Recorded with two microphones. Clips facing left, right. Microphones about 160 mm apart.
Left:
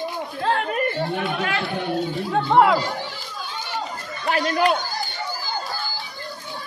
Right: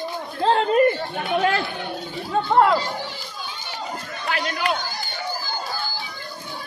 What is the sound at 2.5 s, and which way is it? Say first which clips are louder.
Run: left 1 dB; 10° left (ahead or behind).